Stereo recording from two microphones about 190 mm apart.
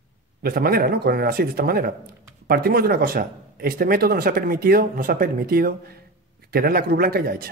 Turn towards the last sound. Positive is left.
turn(degrees=-50)  # may be behind; listen again after turning